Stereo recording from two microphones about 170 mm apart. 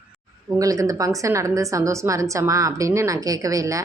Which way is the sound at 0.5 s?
20° right (ahead or behind).